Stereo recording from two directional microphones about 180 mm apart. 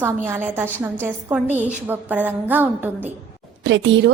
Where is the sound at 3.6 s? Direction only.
90° right.